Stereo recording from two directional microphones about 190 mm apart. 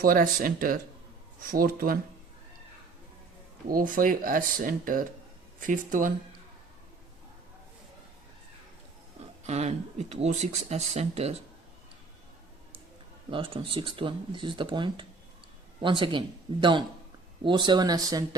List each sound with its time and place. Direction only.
0.0 s speech: 45° right (ahead or behind)
3.7 s speech: 45° right (ahead or behind)
9.5 s speech: 35° right (ahead or behind)
13.3 s speech: 25° right (ahead or behind)